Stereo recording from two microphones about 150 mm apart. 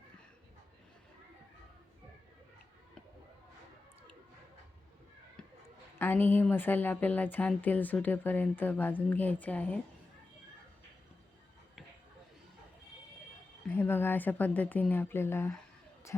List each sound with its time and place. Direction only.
6.0 s a woman's voice: 15° left (ahead or behind)
13.7 s a woman's voice: 15° left (ahead or behind)